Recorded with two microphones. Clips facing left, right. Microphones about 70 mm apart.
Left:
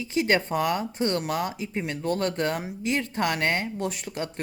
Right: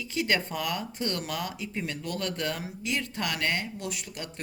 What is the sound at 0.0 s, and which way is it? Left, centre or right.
Speech, left.